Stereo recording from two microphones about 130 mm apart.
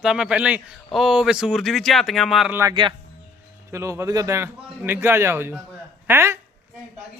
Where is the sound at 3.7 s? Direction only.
25° right (ahead or behind).